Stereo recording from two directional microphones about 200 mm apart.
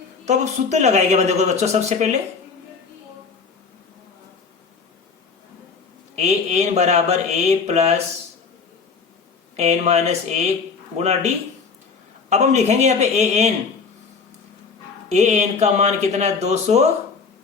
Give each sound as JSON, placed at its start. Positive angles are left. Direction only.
{"t": 0.3, "sound": "speech", "side_deg": -35}
{"t": 6.1, "sound": "speech", "side_deg": -35}
{"t": 9.6, "sound": "speech", "side_deg": -35}
{"t": 12.3, "sound": "speech", "side_deg": -35}
{"t": 15.1, "sound": "speech", "side_deg": -35}